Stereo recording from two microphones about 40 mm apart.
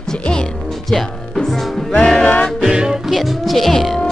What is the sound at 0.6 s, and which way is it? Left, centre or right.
Music, centre.